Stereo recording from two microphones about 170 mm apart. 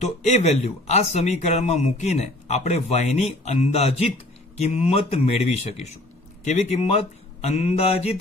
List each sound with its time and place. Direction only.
0.0 s a man's voice: 40° left (ahead or behind)